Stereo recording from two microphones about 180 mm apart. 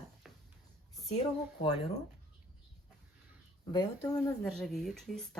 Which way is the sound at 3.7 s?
20° left (ahead or behind).